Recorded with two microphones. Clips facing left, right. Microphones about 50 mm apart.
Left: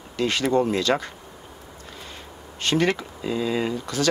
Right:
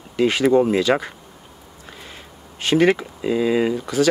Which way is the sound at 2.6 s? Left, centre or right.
Centre.